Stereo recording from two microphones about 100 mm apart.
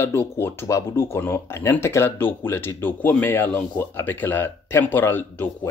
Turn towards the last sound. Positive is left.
turn(degrees=20)  # may be behind; listen again after turning